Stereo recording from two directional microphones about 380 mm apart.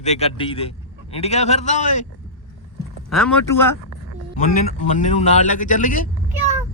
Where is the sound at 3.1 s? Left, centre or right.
Centre.